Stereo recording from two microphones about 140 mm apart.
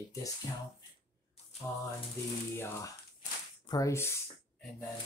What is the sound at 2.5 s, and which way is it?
Speech, 20° left (ahead or behind).